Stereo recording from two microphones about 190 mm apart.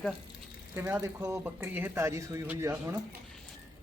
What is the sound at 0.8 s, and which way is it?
Speech, 15° right (ahead or behind).